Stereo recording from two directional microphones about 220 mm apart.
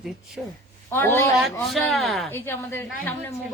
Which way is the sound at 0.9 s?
10° left (ahead or behind).